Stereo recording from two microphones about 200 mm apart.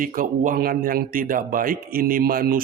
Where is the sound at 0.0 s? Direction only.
45° right (ahead or behind).